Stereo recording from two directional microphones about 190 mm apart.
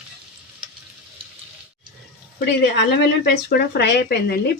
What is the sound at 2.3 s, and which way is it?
Speech, 60° left (ahead or behind).